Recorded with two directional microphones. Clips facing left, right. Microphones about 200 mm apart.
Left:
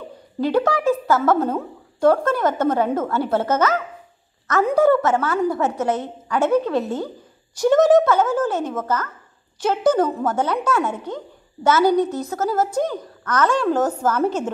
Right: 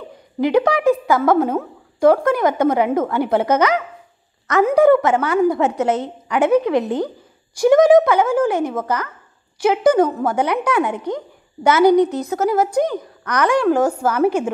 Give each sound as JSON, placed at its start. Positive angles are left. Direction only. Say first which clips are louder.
{"t": 0.4, "sound": "a woman's voice", "louder": "right 3 dB", "side_deg": -15}